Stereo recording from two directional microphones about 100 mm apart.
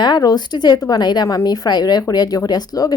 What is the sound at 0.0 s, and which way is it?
A woman's voice, 45° left (ahead or behind).